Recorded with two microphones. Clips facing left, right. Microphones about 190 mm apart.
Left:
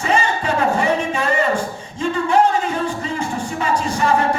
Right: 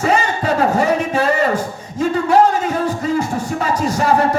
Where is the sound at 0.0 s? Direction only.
35° right (ahead or behind).